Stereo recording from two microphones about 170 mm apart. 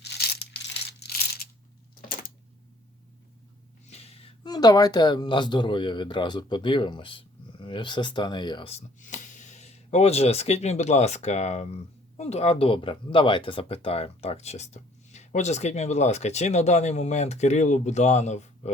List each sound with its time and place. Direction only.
0.0 s tearing: 75° left (ahead or behind)
2.0 s a sound: 55° left (ahead or behind)
3.8 s gasp: 35° left (ahead or behind)
4.4 s speech: 25° left (ahead or behind)
9.0 s speech: 45° left (ahead or behind)